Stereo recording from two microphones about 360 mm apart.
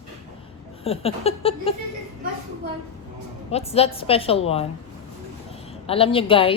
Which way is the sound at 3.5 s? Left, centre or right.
Centre.